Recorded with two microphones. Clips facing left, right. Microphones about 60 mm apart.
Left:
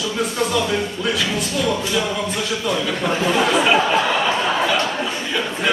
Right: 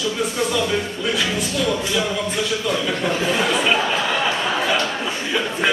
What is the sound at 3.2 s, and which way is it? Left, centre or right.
Speech, left.